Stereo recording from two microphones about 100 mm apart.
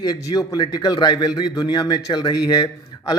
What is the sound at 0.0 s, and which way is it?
A man's voice, 40° left (ahead or behind).